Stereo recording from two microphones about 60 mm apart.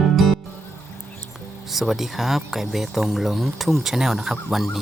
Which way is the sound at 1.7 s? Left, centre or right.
Centre.